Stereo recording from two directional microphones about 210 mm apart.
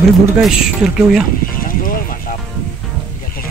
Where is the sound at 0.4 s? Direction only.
Centre (ahead or behind).